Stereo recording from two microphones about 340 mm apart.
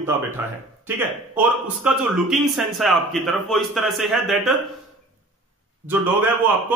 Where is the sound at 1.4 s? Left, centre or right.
Centre.